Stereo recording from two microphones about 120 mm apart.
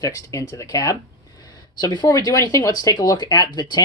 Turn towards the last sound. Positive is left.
turn(degrees=35)  # may be behind; listen again after turning